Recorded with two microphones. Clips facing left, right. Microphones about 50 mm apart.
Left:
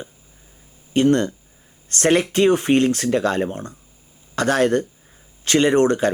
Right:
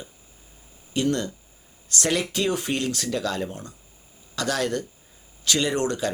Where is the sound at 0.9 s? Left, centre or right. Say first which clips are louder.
Left 8 dB; left.